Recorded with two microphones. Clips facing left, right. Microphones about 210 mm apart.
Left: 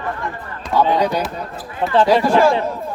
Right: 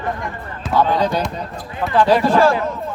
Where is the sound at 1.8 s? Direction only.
25° left (ahead or behind).